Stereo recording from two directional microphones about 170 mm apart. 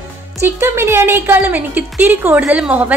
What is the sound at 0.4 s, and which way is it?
A woman's voice, 15° right (ahead or behind).